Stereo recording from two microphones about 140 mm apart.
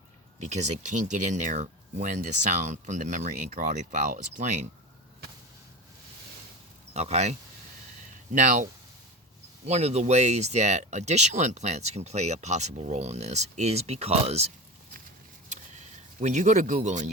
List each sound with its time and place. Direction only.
0.3 s speech: 55° right (ahead or behind)
6.9 s speech: 50° right (ahead or behind)
8.3 s speech: 65° right (ahead or behind)
9.6 s speech: 50° right (ahead or behind)
15.4 s a sound: 55° right (ahead or behind)